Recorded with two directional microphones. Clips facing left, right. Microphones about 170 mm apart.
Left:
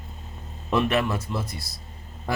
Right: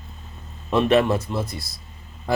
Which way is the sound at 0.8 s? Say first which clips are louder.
Right 7 dB; 25° right (ahead or behind).